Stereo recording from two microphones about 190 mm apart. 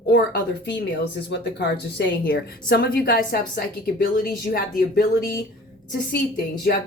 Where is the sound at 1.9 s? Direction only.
60° left (ahead or behind).